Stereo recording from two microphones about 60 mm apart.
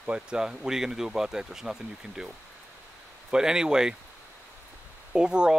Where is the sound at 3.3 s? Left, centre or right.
Centre.